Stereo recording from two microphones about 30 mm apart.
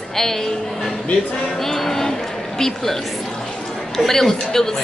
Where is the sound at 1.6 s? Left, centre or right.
Centre.